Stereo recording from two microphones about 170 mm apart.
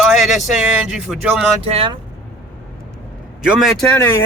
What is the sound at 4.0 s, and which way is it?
Speech, 15° left (ahead or behind).